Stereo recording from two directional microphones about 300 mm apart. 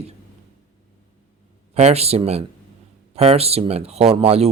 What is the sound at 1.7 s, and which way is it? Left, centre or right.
Speech, right.